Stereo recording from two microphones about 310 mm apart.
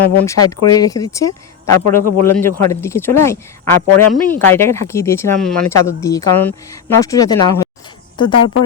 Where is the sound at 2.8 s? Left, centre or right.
Centre.